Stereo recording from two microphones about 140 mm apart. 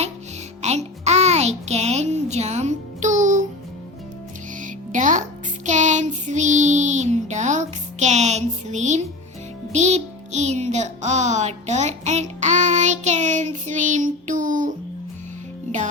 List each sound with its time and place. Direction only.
0.6 s music: 50° right (ahead or behind)
4.5 s music: 65° right (ahead or behind)
5.6 s child singing: 60° right (ahead or behind)
9.7 s music: 55° right (ahead or behind)